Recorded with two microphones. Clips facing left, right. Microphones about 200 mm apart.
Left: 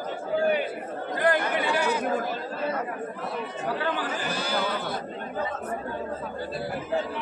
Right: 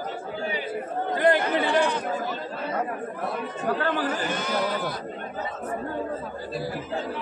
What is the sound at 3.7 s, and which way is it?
Chatter, 55° right (ahead or behind).